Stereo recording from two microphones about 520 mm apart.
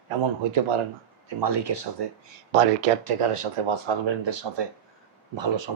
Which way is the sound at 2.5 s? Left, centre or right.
Right.